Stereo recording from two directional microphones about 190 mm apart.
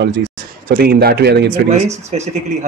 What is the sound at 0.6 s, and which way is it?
Speech, 50° right (ahead or behind).